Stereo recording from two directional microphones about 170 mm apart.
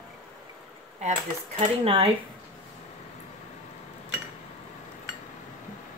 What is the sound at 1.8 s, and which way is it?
Speech, 35° right (ahead or behind).